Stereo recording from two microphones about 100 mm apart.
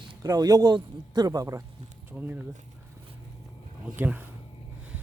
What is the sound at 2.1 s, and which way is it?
Speech, 15° right (ahead or behind).